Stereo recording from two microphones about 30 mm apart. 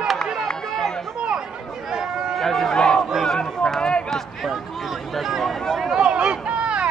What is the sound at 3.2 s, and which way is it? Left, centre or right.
Run, centre.